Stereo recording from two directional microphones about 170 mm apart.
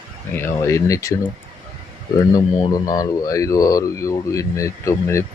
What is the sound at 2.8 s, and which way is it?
Speech, 20° left (ahead or behind).